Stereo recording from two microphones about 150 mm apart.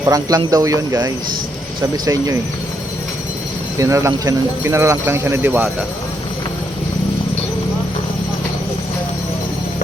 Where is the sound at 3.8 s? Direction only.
20° right (ahead or behind).